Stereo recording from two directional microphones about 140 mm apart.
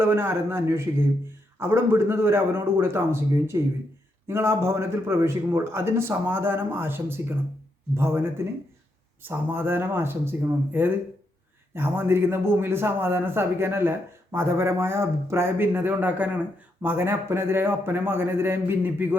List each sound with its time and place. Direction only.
0.0 s a man's voice: 15° right (ahead or behind)